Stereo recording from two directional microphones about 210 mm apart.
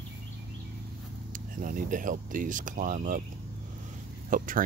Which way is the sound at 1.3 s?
40° right (ahead or behind).